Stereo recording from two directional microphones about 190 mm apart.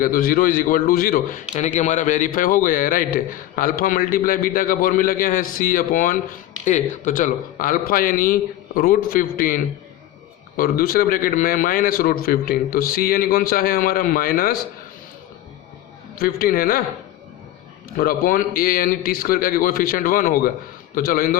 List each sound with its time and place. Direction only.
0.0 s a man's voice: 50° left (ahead or behind)
10.6 s a man's voice: 50° left (ahead or behind)
16.1 s a man's voice: 50° left (ahead or behind)
17.9 s a man's voice: 50° left (ahead or behind)